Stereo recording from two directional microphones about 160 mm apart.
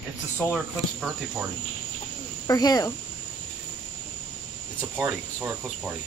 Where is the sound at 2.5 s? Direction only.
25° left (ahead or behind).